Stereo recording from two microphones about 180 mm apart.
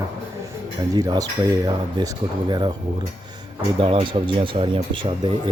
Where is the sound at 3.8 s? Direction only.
30° right (ahead or behind).